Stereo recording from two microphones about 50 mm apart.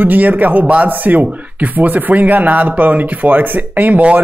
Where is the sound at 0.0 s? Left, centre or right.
Right.